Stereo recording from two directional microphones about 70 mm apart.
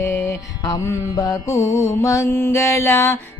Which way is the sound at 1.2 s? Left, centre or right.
Left.